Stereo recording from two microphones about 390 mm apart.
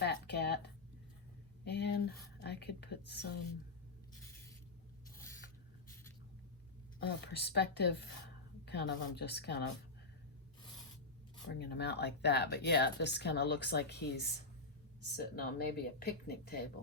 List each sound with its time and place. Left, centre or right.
0.0 s a sound: left
1.6 s speech: left
7.3 s speech: left
11.4 s speech: left